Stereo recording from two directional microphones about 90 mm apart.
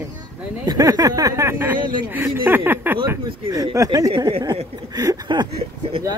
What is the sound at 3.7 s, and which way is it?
Speech, 40° right (ahead or behind).